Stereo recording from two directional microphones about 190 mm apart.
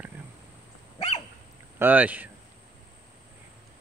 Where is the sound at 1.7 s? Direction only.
10° right (ahead or behind).